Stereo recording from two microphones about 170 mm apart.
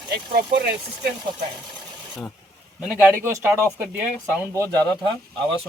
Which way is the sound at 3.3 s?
15° right (ahead or behind).